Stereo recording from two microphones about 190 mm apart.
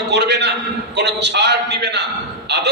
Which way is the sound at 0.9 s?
60° right (ahead or behind).